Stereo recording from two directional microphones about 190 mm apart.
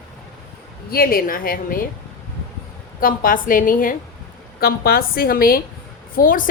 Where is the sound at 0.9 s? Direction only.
50° left (ahead or behind).